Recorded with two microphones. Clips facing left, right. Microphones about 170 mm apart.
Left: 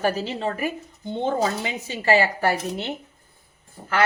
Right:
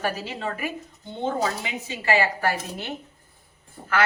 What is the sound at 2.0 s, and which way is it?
Speech, 35° left (ahead or behind).